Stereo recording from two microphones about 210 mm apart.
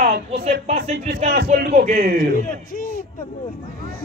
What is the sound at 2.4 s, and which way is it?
Speech, 40° left (ahead or behind).